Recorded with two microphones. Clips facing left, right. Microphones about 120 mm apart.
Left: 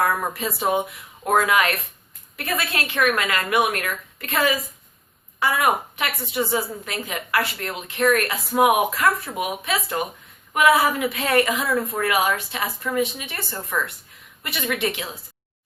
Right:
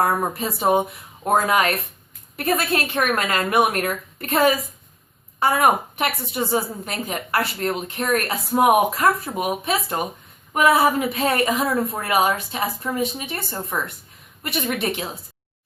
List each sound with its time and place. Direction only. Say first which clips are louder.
0.0 s a woman's voice: right 2 dB; 35° right (ahead or behind)
9.9 s a woman's voice: right 1 dB; 25° right (ahead or behind)